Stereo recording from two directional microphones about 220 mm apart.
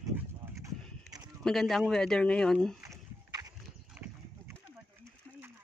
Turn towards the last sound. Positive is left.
turn(degrees=-5)  # may be behind; listen again after turning